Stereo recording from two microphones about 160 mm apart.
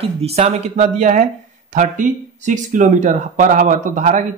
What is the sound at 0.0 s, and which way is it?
Speech, 40° right (ahead or behind).